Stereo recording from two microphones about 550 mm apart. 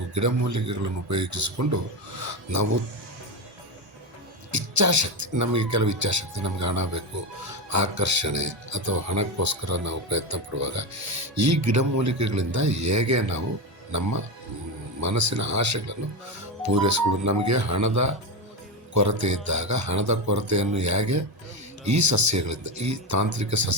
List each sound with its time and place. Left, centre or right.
0.1 s speech: right
4.5 s speech: right
15.0 s speech: right